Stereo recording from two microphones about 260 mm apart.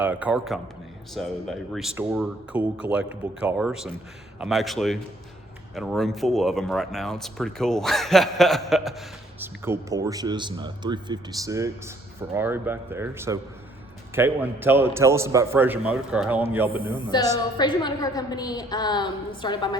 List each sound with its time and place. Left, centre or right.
0.0 s speech: centre
17.1 s a woman's voice: centre